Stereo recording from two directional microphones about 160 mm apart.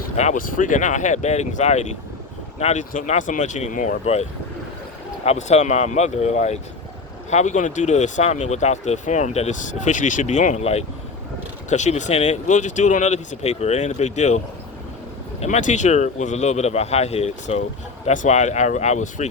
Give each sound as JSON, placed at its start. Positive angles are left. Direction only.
{"t": 0.2, "sound": "speech", "side_deg": 50}